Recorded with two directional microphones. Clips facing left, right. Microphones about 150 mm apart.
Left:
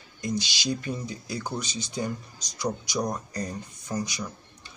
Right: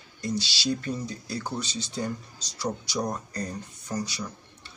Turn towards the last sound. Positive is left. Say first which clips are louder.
# left 1 dB
turn(degrees=15)  # may be behind; listen again after turning